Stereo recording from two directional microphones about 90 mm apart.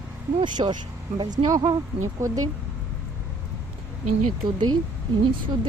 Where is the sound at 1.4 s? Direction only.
40° right (ahead or behind).